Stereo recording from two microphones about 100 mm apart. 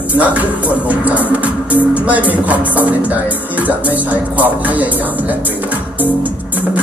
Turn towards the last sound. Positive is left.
turn(degrees=-15)  # may be behind; listen again after turning